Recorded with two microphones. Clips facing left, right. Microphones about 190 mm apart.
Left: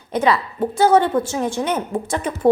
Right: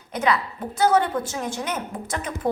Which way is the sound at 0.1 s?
30° left (ahead or behind).